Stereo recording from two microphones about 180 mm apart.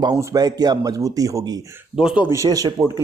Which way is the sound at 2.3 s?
20° right (ahead or behind).